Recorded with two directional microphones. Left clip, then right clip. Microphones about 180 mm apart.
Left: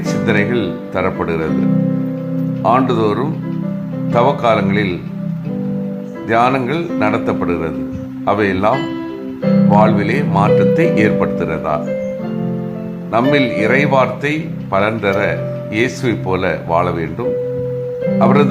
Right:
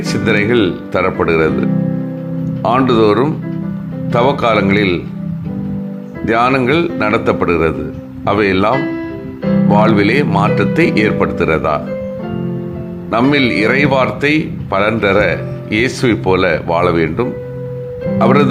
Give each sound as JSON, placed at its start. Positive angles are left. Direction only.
{"t": 0.1, "sound": "speech", "side_deg": -20}
{"t": 2.6, "sound": "speech", "side_deg": -20}
{"t": 6.2, "sound": "speech", "side_deg": -20}
{"t": 9.4, "sound": "music", "side_deg": 5}
{"t": 9.6, "sound": "speech", "side_deg": -15}
{"t": 13.1, "sound": "speech", "side_deg": -20}